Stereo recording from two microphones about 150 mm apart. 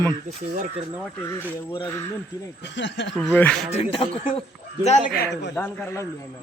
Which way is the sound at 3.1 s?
5° left (ahead or behind).